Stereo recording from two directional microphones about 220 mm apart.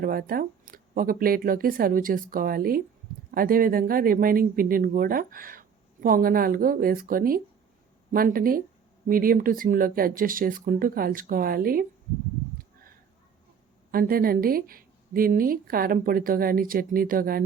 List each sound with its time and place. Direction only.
0.0 s speech: 40° right (ahead or behind)
13.9 s speech: 40° right (ahead or behind)